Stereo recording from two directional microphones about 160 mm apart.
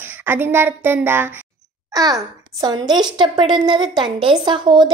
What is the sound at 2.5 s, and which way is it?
A woman's voice, 25° right (ahead or behind).